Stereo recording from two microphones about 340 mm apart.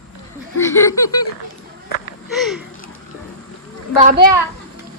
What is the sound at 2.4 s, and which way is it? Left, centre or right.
Speech, centre.